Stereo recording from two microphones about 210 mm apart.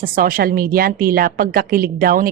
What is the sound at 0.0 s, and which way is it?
A woman's voice, 45° right (ahead or behind).